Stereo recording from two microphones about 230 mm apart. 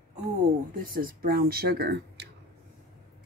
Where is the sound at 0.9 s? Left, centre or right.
Right.